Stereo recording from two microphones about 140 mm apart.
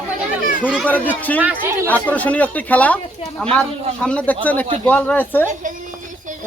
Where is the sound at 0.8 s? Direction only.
10° left (ahead or behind).